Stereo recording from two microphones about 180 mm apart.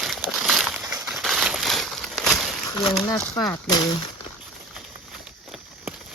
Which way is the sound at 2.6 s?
20° left (ahead or behind).